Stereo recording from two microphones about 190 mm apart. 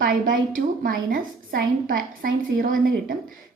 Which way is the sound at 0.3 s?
45° right (ahead or behind).